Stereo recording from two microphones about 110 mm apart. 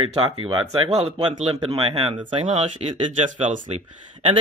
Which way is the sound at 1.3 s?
90° right.